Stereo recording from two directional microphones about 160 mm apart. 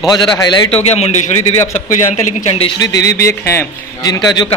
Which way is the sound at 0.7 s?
40° left (ahead or behind).